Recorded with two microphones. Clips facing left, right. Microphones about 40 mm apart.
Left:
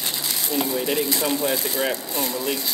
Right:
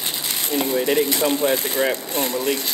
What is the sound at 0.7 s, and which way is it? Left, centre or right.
Speech, right.